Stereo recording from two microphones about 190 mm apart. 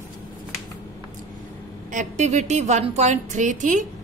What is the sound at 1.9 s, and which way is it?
A woman's voice, 40° right (ahead or behind).